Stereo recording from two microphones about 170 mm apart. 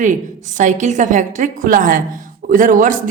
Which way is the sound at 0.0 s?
45° right (ahead or behind).